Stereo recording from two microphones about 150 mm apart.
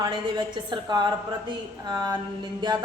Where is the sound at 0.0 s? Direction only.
30° right (ahead or behind).